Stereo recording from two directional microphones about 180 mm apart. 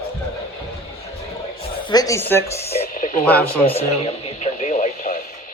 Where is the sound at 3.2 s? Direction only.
10° left (ahead or behind).